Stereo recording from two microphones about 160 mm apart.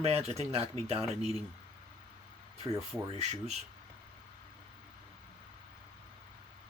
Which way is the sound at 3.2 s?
45° right (ahead or behind).